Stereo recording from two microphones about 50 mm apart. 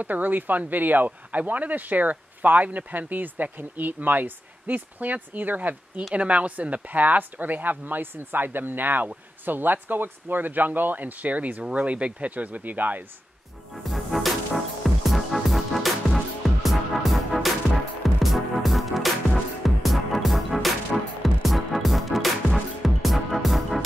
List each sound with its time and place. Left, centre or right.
0.0 s speech: right
13.8 s music: centre